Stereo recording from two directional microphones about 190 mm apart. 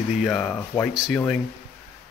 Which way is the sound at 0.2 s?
5° left (ahead or behind).